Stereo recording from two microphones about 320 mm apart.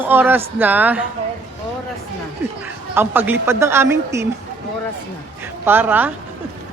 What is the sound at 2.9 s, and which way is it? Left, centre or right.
A woman's voice, centre.